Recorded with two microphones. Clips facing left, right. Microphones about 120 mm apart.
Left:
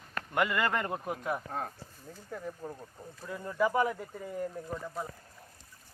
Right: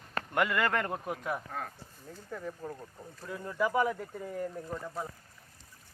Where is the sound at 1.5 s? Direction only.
30° left (ahead or behind).